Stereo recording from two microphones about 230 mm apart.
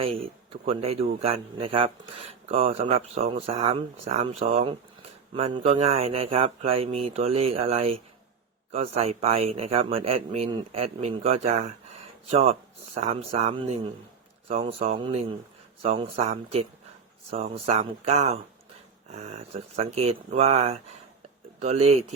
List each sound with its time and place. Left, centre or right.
0.0 s speech: right